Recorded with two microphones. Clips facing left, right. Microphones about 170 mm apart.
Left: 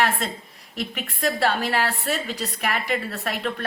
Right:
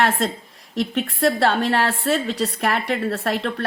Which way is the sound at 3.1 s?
40° right (ahead or behind).